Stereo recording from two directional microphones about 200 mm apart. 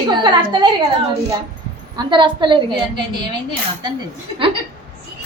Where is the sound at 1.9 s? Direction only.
25° right (ahead or behind).